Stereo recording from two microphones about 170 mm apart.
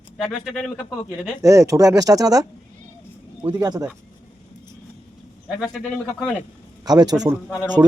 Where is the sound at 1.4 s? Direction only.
20° right (ahead or behind).